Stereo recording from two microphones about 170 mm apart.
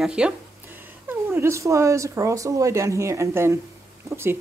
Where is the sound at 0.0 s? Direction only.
5° right (ahead or behind).